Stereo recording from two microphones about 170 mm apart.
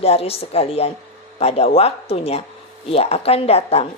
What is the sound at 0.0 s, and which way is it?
Speech, 35° left (ahead or behind).